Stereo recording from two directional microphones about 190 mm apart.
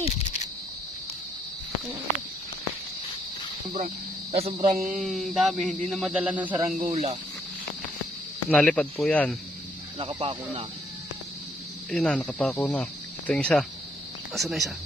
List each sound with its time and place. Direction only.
3.8 s speech: 55° right (ahead or behind)
4.5 s speech: 35° right (ahead or behind)
4.8 s speech: centre (ahead or behind)
6.7 s speech: 40° right (ahead or behind)
8.5 s speech: 5° left (ahead or behind)
9.9 s speech: 25° right (ahead or behind)
11.9 s speech: 5° left (ahead or behind)